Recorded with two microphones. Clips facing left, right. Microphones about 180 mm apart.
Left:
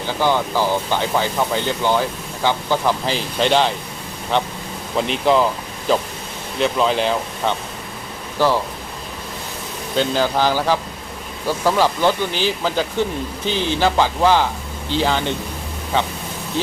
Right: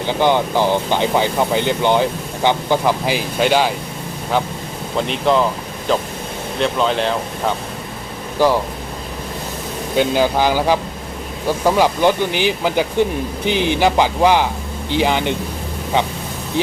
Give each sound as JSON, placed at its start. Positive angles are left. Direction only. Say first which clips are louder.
{"t": 0.1, "sound": "speech", "louder": "right 3 dB", "side_deg": -20}
{"t": 4.9, "sound": "speech", "louder": "even", "side_deg": 0}
{"t": 8.4, "sound": "speech", "louder": "right 3 dB", "side_deg": -15}
{"t": 9.9, "sound": "speech", "louder": "right 3 dB", "side_deg": -15}